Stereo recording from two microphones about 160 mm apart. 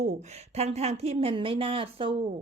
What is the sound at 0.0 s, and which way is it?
A woman's voice, 45° right (ahead or behind).